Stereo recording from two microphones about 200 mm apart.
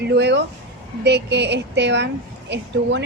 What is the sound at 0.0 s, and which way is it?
Speech, 55° right (ahead or behind).